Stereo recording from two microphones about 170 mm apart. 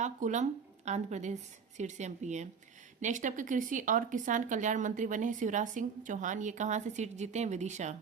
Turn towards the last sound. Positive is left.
turn(degrees=-45)  # may be behind; listen again after turning